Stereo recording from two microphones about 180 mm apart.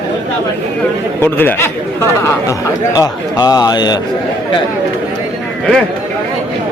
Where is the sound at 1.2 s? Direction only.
10° left (ahead or behind).